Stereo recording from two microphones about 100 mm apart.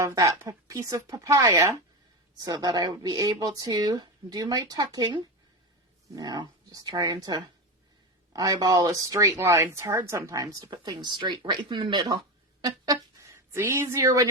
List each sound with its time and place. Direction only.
0.0 s speech: 35° right (ahead or behind)
2.4 s speech: 40° right (ahead or behind)
12.6 s speech: 35° right (ahead or behind)